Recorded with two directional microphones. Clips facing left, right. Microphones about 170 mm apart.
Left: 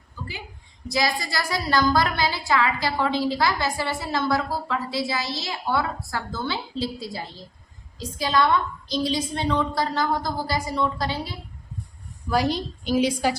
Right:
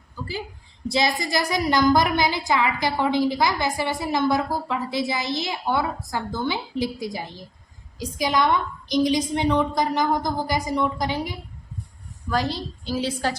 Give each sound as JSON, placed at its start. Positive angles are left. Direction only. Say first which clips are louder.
{"t": 0.9, "sound": "a woman's voice", "louder": "right 2 dB", "side_deg": -25}
{"t": 12.3, "sound": "a woman's voice", "louder": "left 2 dB", "side_deg": 15}